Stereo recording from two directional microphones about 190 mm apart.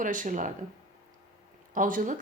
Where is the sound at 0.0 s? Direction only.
45° right (ahead or behind).